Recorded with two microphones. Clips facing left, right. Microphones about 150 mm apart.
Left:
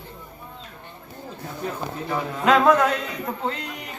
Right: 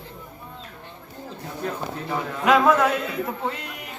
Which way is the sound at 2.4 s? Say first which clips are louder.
Left 1 dB; 10° right (ahead or behind).